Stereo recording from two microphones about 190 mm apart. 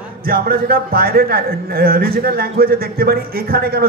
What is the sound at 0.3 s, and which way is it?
Speech, 50° right (ahead or behind).